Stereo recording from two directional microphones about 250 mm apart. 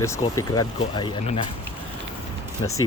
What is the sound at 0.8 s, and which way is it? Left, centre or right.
Speech, left.